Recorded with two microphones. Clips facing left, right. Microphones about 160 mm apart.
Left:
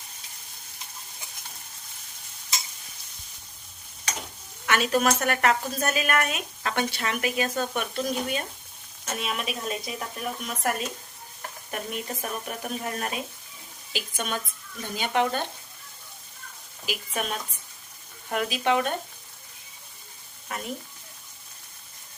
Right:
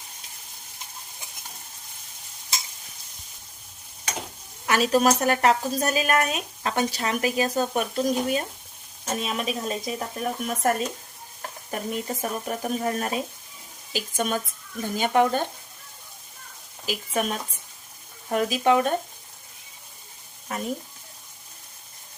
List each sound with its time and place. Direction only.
4.6 s a woman's voice: 35° right (ahead or behind)
16.8 s a woman's voice: 40° right (ahead or behind)